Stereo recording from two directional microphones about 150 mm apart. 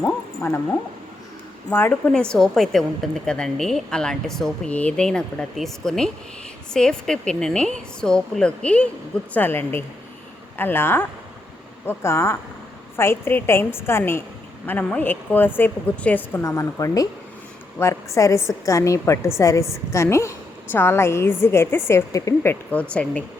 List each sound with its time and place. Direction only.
0.4 s a woman's voice: 15° left (ahead or behind)
1.7 s a woman's voice: 10° left (ahead or behind)
22.7 s a woman's voice: 10° left (ahead or behind)